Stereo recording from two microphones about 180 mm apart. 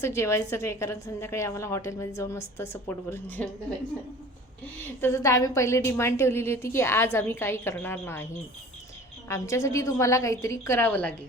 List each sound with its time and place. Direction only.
0.0 s a woman's voice: 15° left (ahead or behind)
4.9 s a woman's voice: 15° left (ahead or behind)
9.3 s a woman's voice: 15° left (ahead or behind)